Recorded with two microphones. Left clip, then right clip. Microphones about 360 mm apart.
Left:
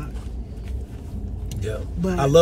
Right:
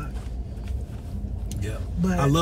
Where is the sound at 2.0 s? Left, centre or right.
Centre.